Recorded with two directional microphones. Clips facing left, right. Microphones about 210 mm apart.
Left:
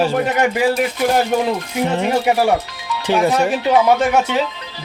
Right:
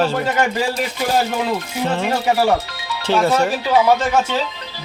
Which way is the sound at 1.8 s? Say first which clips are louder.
Left 2 dB; 15° left (ahead or behind).